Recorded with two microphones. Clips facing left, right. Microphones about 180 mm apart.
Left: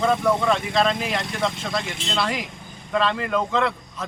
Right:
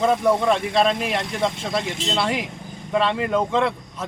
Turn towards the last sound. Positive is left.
turn(degrees=-25)  # may be behind; listen again after turning